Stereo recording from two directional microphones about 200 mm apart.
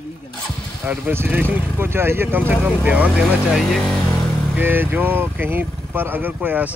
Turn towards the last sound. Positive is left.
turn(degrees=-10)  # may be behind; listen again after turning